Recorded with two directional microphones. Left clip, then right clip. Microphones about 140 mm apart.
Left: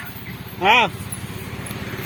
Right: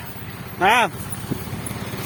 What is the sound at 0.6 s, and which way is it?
Speech, 35° right (ahead or behind).